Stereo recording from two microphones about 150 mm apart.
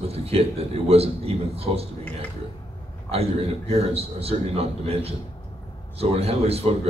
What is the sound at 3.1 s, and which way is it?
A man's voice, 40° right (ahead or behind).